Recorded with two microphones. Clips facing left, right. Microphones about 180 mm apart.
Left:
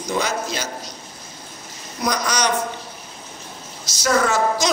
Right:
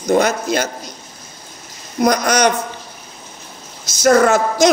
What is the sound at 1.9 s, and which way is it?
Speech, 50° right (ahead or behind).